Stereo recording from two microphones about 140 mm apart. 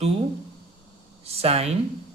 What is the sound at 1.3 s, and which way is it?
Speech, 45° right (ahead or behind).